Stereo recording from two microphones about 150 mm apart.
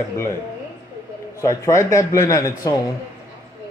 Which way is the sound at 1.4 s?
20° left (ahead or behind).